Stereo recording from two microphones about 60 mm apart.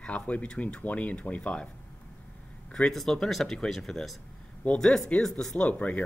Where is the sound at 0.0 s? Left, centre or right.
Centre.